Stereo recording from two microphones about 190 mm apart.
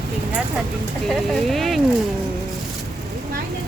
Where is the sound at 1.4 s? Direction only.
Centre (ahead or behind).